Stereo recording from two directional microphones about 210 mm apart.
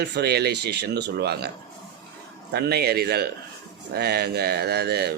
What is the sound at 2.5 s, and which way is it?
A man's voice, 50° right (ahead or behind).